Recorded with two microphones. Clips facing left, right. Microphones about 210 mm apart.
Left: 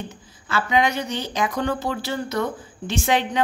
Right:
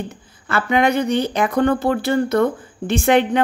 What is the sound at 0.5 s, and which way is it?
Speech, 55° right (ahead or behind).